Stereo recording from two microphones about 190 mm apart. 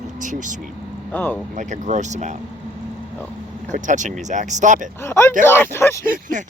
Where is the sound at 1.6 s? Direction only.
40° right (ahead or behind).